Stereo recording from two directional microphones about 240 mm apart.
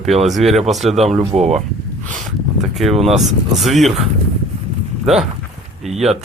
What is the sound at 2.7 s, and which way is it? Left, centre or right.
Speech, centre.